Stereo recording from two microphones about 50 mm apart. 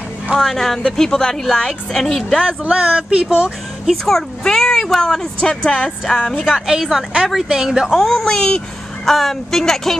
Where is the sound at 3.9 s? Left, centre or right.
Centre.